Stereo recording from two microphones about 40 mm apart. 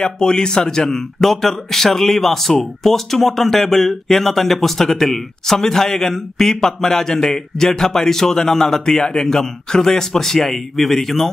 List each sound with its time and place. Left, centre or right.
0.0 s speech: left